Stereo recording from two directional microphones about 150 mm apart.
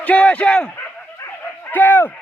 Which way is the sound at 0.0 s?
10° left (ahead or behind).